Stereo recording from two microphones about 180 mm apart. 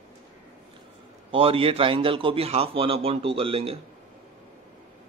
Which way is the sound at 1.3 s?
30° right (ahead or behind).